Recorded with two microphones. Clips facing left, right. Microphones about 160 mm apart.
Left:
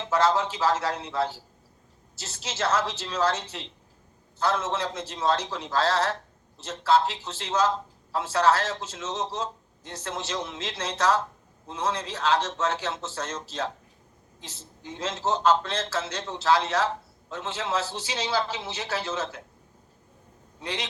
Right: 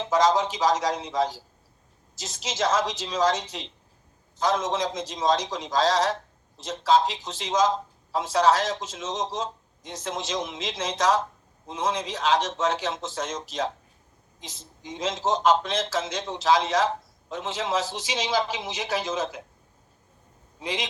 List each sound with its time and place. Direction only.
0.0 s a man's voice: 15° right (ahead or behind)
14.5 s a woman's voice: 90° right
14.9 s a man's voice: 10° right (ahead or behind)
20.6 s a man's voice: 15° right (ahead or behind)